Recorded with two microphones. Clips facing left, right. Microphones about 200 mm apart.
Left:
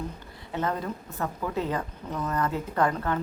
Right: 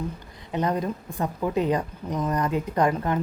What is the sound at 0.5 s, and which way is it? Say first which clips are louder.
A woman's voice: right 4 dB; 15° right (ahead or behind).